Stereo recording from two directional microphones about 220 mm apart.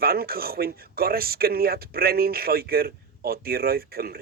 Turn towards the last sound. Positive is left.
turn(degrees=-45)  # may be behind; listen again after turning